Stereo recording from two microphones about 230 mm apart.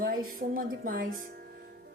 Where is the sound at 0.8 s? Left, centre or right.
Right.